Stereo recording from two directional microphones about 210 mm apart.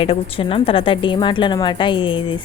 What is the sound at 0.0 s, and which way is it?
A woman's voice, 25° left (ahead or behind).